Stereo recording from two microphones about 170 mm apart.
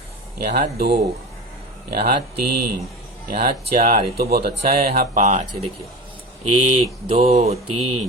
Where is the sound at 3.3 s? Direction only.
60° right (ahead or behind); by 5.7 s 40° right (ahead or behind).